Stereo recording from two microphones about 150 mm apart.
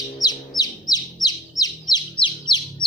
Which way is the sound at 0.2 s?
25° left (ahead or behind).